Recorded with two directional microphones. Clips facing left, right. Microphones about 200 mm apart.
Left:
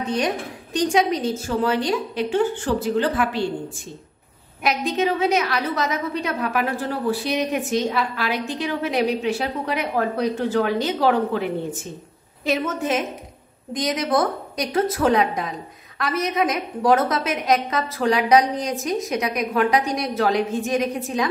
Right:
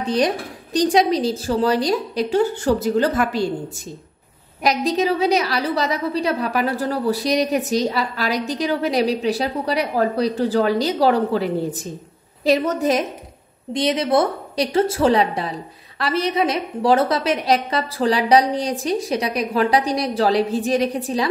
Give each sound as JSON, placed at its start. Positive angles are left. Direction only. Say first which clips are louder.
{"t": 0.0, "sound": "a woman's voice", "louder": "right 3 dB", "side_deg": -35}
{"t": 4.6, "sound": "a woman's voice", "louder": "right 3 dB", "side_deg": -35}
{"t": 13.7, "sound": "a woman's voice", "louder": "right 3 dB", "side_deg": -25}